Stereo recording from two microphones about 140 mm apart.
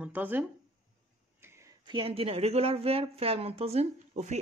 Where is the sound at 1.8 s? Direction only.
40° right (ahead or behind).